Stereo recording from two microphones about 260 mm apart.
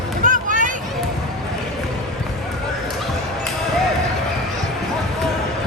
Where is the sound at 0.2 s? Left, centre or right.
Right.